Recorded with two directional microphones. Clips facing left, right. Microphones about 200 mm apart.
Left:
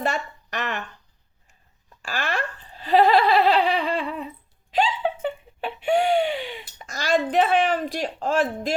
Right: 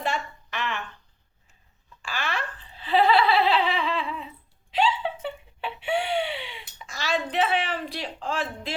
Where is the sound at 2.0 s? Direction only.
45° left (ahead or behind).